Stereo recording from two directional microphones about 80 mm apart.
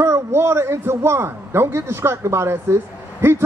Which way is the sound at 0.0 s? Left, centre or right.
Right.